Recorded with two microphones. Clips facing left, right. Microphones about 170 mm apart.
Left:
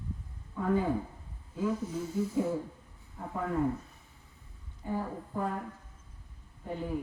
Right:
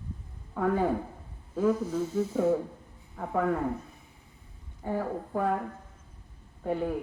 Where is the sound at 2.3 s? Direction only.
75° right (ahead or behind).